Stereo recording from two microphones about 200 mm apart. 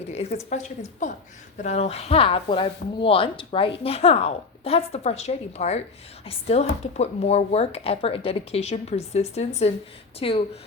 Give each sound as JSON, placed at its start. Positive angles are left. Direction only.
{"t": 0.1, "sound": "speech", "side_deg": 35}